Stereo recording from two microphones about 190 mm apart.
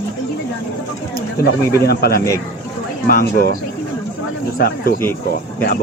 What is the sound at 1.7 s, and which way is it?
A man's voice, 55° left (ahead or behind).